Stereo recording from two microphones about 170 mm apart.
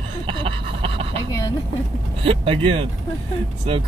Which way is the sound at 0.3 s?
30° right (ahead or behind).